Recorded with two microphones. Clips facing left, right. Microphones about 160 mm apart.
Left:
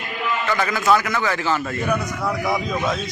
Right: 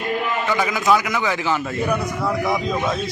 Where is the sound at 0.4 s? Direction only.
10° right (ahead or behind).